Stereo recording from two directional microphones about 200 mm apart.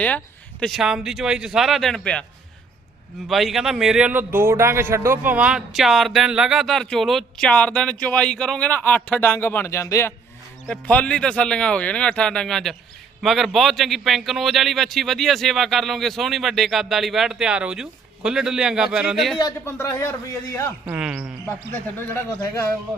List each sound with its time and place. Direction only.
0.6 s a man's voice: centre (ahead or behind)
3.2 s a man's voice: centre (ahead or behind)
19.4 s speech: 15° left (ahead or behind)
20.8 s speech: 5° right (ahead or behind)
21.4 s speech: 10° left (ahead or behind)